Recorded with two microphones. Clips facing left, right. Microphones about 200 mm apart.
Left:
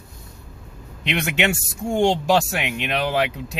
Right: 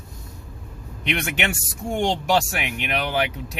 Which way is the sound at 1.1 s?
25° left (ahead or behind).